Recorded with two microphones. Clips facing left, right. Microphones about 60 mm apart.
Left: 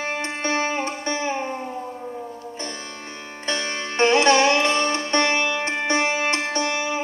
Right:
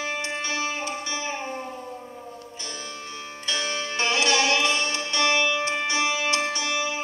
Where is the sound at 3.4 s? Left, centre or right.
Left.